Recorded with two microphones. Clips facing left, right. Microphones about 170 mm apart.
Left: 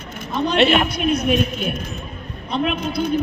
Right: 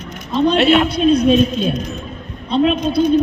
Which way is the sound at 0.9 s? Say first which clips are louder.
Right 7 dB; 30° right (ahead or behind).